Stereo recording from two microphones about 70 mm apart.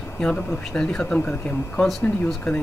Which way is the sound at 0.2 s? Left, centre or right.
Centre.